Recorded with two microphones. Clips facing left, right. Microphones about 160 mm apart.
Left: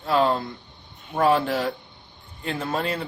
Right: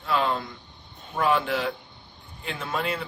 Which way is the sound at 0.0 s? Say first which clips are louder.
Left 4 dB; 35° left (ahead or behind).